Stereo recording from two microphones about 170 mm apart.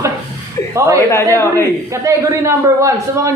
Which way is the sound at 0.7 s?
20° right (ahead or behind).